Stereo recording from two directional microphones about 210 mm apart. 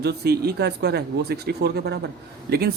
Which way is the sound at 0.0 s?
50° right (ahead or behind).